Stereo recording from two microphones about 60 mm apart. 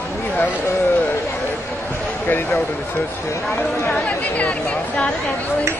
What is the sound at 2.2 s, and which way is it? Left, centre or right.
Speech, left.